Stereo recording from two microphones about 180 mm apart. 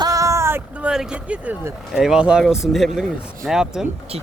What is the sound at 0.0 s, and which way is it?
Speech, 20° right (ahead or behind).